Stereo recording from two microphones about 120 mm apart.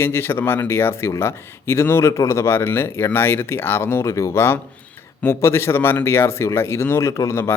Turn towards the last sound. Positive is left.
turn(degrees=25)  # may be behind; listen again after turning